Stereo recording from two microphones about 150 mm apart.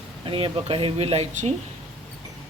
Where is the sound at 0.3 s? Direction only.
35° right (ahead or behind); by 1.5 s 50° right (ahead or behind).